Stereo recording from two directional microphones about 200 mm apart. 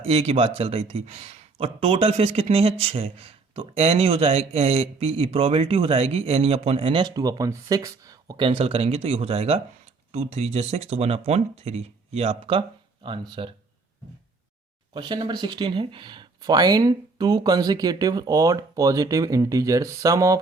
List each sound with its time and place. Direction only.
0.0 s speech: 30° right (ahead or behind)
14.9 s speech: 20° right (ahead or behind)